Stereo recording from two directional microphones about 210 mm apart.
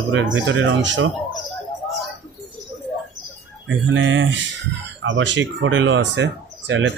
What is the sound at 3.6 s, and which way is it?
Speech, 65° right (ahead or behind).